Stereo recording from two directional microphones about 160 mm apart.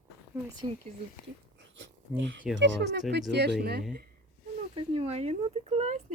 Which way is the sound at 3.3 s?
90° right.